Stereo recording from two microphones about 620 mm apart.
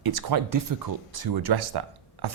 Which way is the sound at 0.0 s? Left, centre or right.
Right.